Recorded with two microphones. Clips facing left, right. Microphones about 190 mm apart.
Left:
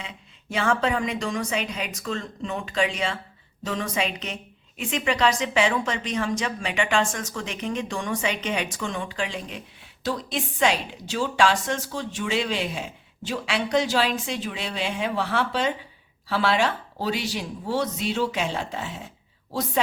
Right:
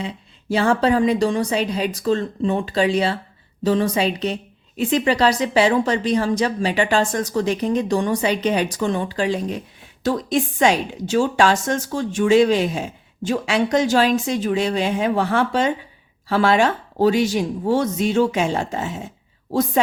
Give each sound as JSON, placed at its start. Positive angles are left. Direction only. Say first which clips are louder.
{"t": 0.0, "sound": "a woman's voice", "louder": "right 11 dB", "side_deg": -35}